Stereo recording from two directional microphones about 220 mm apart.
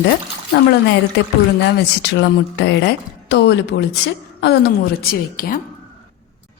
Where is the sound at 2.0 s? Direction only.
50° left (ahead or behind).